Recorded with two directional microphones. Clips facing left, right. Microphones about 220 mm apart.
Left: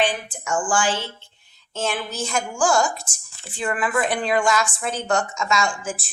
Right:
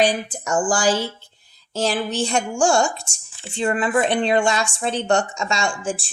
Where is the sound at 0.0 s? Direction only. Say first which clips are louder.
Right 4 dB; 40° right (ahead or behind).